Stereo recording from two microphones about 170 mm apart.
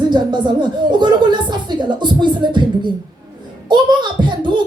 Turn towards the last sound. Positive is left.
turn(degrees=-25)  # may be behind; listen again after turning